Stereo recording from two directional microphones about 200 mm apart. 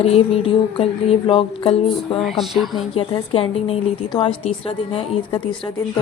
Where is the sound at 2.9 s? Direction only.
30° left (ahead or behind).